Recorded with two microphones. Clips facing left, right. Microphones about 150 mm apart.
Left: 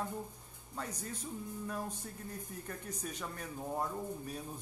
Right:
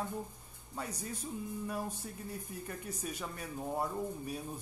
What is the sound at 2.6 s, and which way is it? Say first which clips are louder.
Speech: right 1 dB; 10° right (ahead or behind).